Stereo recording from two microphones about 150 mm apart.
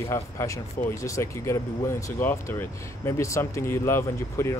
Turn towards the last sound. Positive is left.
turn(degrees=15)  # may be behind; listen again after turning